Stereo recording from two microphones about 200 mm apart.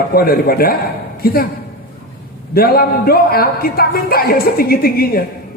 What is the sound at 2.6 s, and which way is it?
A man's voice, 50° left (ahead or behind).